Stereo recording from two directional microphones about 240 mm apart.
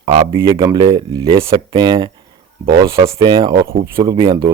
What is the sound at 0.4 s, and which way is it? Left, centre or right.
Speech, right.